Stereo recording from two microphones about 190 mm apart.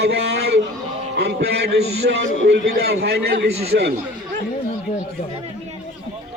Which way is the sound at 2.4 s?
60° right (ahead or behind).